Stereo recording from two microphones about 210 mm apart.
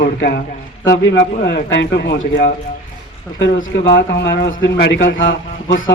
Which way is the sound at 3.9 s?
55° left (ahead or behind).